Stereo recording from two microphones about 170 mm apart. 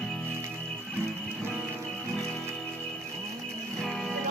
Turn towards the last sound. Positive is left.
turn(degrees=0)  # may be behind; listen again after turning